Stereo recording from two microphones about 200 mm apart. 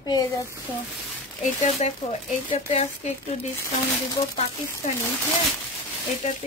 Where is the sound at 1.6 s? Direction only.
35° left (ahead or behind).